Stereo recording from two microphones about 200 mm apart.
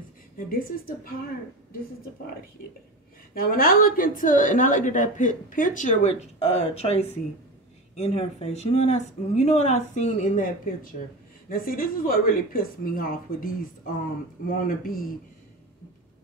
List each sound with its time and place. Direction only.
0.6 s speech: 45° left (ahead or behind)
2.6 s a woman's voice: 45° left (ahead or behind)